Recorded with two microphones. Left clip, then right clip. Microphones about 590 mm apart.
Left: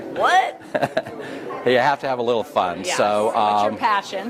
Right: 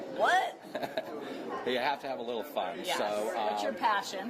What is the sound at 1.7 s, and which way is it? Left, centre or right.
Speech, left.